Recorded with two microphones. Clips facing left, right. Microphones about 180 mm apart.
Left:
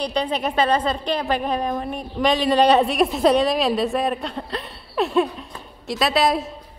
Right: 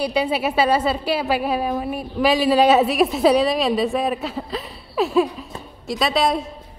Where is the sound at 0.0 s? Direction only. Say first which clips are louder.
Right 2 dB; 10° right (ahead or behind).